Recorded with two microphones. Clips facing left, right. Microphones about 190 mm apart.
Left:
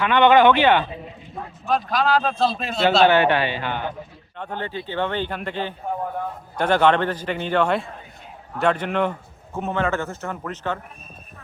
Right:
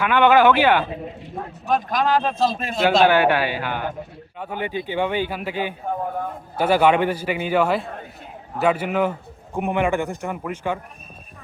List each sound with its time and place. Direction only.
0.0 s a man's voice: 5° right (ahead or behind)